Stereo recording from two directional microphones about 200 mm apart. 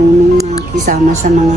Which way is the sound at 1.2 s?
40° right (ahead or behind).